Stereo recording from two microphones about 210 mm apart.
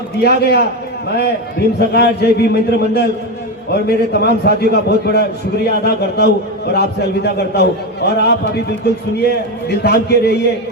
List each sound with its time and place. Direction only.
0.2 s a man's voice: 50° left (ahead or behind)
1.9 s a man's voice: 50° left (ahead or behind)